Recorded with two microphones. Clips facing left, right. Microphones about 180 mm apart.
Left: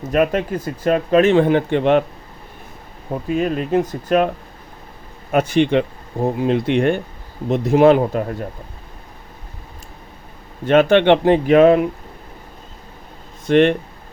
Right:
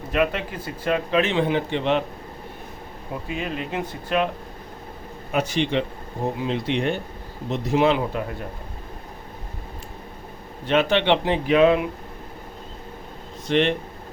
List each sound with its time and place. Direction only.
0.1 s speech: 45° left (ahead or behind)
3.2 s speech: 45° left (ahead or behind)
5.3 s speech: 55° left (ahead or behind)
10.7 s speech: 50° left (ahead or behind)
13.5 s speech: 50° left (ahead or behind)